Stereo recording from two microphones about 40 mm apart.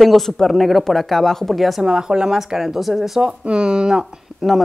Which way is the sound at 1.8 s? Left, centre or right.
Centre.